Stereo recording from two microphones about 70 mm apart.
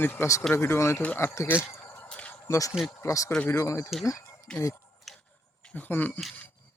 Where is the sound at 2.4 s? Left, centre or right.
Left.